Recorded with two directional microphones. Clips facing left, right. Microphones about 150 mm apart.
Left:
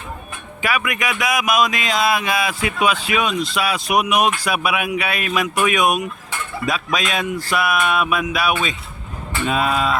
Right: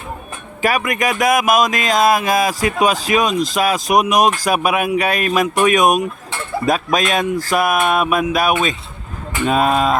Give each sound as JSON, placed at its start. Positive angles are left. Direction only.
{"t": 0.6, "sound": "speech", "side_deg": -40}